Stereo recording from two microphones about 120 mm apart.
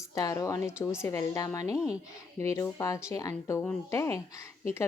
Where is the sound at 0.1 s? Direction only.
30° left (ahead or behind).